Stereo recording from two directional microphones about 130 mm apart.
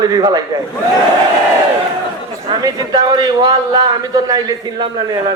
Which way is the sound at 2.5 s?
30° right (ahead or behind).